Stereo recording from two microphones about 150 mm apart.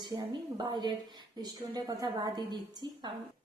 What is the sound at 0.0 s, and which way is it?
A woman's voice, 30° right (ahead or behind).